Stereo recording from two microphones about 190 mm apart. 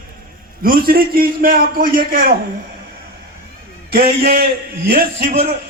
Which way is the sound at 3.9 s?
55° right (ahead or behind).